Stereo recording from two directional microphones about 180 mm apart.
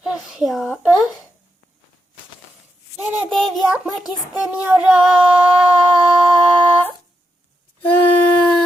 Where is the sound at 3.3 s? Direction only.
Centre (ahead or behind).